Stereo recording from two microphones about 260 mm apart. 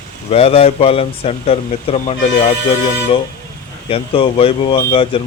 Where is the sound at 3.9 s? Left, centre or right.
Left.